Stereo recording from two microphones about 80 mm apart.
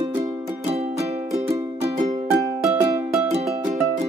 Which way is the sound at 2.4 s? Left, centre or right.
Right.